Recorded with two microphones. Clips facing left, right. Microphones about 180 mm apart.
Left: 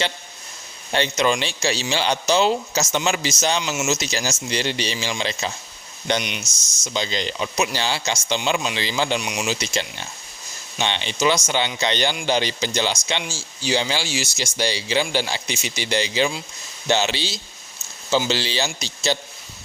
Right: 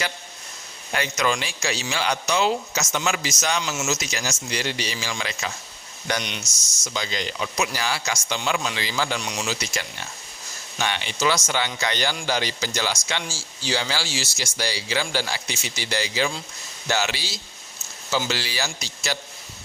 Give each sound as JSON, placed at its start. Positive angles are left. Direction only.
{"t": 0.9, "sound": "speech", "side_deg": 25}
{"t": 9.2, "sound": "speech", "side_deg": 10}